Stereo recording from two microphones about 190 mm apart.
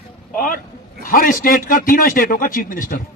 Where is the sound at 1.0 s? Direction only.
45° left (ahead or behind).